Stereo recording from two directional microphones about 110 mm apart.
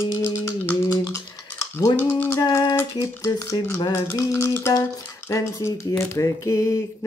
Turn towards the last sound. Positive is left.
turn(degrees=30)  # may be behind; listen again after turning